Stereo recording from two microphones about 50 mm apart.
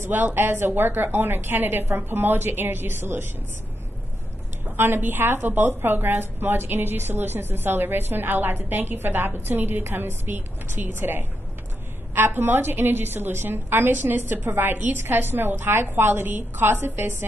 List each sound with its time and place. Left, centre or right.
0.1 s a woman's voice: right
4.7 s a woman's voice: right